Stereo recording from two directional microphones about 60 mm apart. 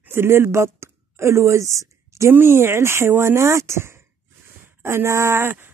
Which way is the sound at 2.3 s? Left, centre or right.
Right.